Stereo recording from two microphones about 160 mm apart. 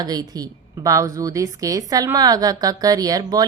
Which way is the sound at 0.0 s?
25° right (ahead or behind).